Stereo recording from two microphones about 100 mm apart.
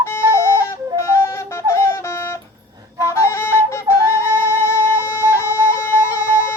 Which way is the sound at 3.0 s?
30° left (ahead or behind).